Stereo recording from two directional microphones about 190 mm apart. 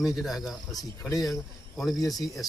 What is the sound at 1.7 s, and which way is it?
Speech, centre (ahead or behind).